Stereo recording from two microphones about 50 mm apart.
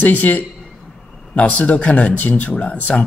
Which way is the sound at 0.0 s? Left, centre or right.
Left.